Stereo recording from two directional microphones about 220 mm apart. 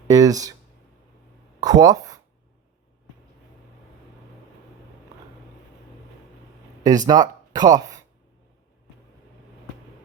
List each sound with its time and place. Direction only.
0.1 s speech: 15° right (ahead or behind)
1.6 s speech: 15° right (ahead or behind)
6.8 s speech: 15° right (ahead or behind)